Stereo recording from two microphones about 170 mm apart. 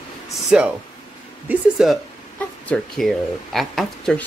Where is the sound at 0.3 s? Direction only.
5° right (ahead or behind).